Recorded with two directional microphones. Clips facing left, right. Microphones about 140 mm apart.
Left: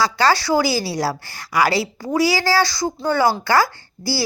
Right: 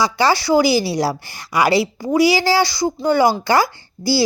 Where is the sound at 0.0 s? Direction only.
15° right (ahead or behind).